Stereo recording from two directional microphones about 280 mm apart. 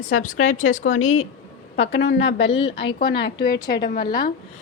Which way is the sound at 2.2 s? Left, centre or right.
Centre.